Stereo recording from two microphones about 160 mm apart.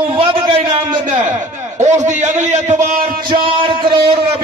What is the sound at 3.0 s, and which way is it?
A man's voice, 30° right (ahead or behind).